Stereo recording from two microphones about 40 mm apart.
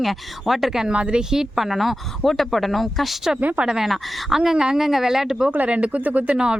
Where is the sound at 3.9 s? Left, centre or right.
Centre.